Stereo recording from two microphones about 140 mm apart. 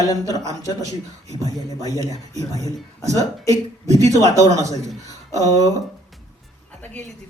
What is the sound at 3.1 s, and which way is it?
Speech, 25° right (ahead or behind).